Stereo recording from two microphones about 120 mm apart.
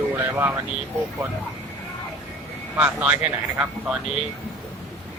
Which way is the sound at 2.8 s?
10° right (ahead or behind).